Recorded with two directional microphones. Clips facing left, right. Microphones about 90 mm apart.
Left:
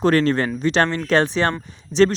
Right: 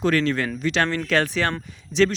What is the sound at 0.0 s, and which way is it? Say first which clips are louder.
Speech: left 4 dB; 35° left (ahead or behind).